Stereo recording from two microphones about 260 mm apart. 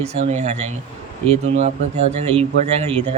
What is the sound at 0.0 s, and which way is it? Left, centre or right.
Speech, right.